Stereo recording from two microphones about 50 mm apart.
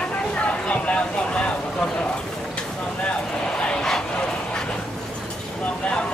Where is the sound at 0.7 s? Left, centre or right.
Left.